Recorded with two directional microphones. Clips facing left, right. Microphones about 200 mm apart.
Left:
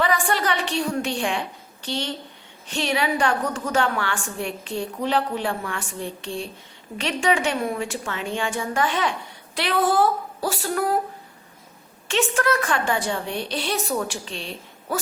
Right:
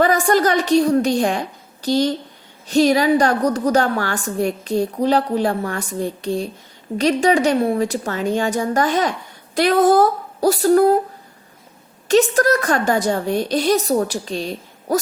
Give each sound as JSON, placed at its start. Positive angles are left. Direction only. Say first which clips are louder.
{"t": 0.0, "sound": "a woman's voice", "louder": "right 7 dB", "side_deg": -40}
{"t": 12.0, "sound": "a woman's voice", "louder": "right 8 dB", "side_deg": -40}